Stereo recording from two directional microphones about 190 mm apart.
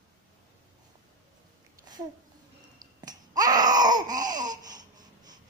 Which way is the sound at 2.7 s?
20° right (ahead or behind).